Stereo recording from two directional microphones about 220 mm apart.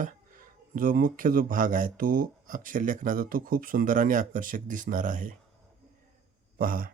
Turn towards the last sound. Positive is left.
turn(degrees=-40)  # may be behind; listen again after turning